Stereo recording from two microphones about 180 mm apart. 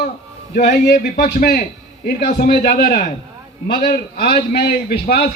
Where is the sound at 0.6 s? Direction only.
65° left (ahead or behind).